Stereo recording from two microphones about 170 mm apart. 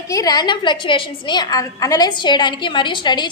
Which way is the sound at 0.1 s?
20° left (ahead or behind).